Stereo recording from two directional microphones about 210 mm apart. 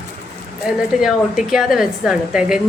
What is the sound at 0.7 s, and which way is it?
A woman's voice, 5° right (ahead or behind).